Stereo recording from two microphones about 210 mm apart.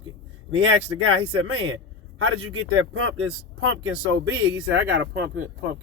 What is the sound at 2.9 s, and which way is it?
Speech, 90° right.